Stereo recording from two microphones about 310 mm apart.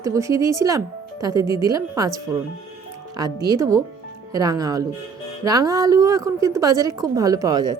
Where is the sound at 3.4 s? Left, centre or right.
Centre.